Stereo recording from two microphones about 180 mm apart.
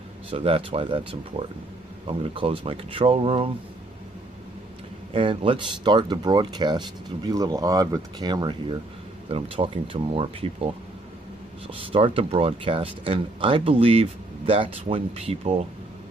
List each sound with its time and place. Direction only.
0.3 s speech: 30° right (ahead or behind)
5.1 s speech: 30° right (ahead or behind)
11.8 s speech: 30° right (ahead or behind)